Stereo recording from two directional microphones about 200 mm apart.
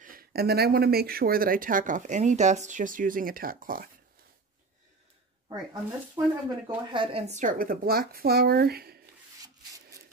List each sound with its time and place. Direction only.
0.0 s speech: 45° right (ahead or behind)
5.5 s speech: 20° right (ahead or behind); by 9.0 s 50° right (ahead or behind)